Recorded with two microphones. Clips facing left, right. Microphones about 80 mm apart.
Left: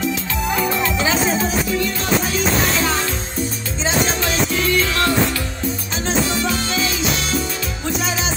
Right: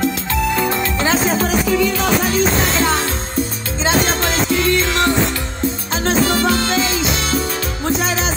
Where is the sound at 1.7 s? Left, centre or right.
Right.